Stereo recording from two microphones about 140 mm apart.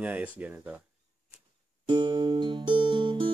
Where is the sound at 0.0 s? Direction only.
10° right (ahead or behind).